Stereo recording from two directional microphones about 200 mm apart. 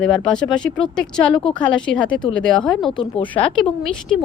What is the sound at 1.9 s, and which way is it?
A woman's voice, 5° left (ahead or behind).